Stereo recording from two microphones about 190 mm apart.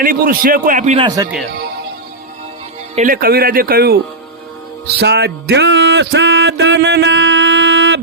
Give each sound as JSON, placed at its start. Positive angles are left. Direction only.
{"t": 0.0, "sound": "speech", "side_deg": -45}
{"t": 0.9, "sound": "speech", "side_deg": -20}
{"t": 2.9, "sound": "speech", "side_deg": -45}
{"t": 4.9, "sound": "music", "side_deg": -60}